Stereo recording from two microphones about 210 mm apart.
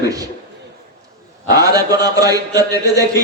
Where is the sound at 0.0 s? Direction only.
15° right (ahead or behind).